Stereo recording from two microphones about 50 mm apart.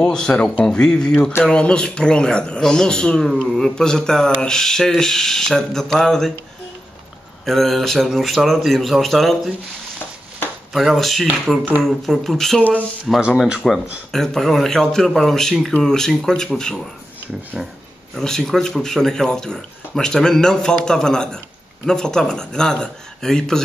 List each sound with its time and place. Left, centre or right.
0.0 s a man's voice: centre
7.4 s speech: centre
10.7 s speech: centre
17.5 s speech: centre
18.2 s speech: centre